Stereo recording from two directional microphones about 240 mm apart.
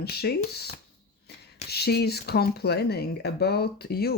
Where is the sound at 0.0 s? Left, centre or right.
Left.